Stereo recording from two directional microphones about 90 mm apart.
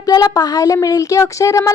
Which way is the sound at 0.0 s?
40° left (ahead or behind).